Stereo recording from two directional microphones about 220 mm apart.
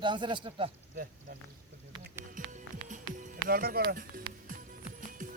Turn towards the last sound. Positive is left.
turn(degrees=-35)  # may be behind; listen again after turning